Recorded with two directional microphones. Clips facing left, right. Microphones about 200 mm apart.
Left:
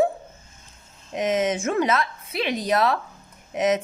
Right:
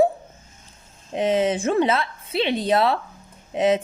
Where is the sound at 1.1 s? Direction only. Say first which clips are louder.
Right 2 dB; 30° right (ahead or behind).